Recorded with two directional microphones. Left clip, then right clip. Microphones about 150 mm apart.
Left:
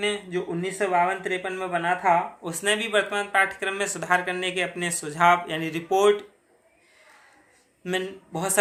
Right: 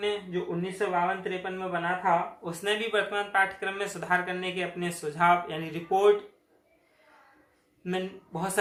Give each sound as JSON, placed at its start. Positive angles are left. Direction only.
{"t": 0.0, "sound": "speech", "side_deg": 45}
{"t": 7.9, "sound": "speech", "side_deg": 40}